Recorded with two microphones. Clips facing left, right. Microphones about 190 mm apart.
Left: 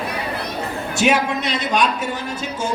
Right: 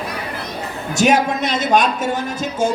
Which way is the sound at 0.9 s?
40° right (ahead or behind).